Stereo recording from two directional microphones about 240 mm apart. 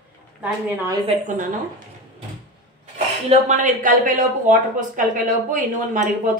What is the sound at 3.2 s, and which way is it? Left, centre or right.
Speech, right.